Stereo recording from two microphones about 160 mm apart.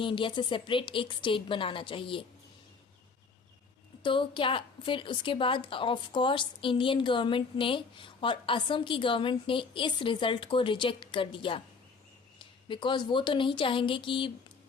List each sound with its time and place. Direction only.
0.0 s a woman's voice: 30° left (ahead or behind)
4.0 s a woman's voice: 30° left (ahead or behind)